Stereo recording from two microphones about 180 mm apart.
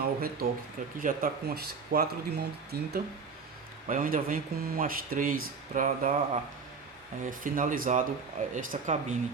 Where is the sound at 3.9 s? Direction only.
50° right (ahead or behind).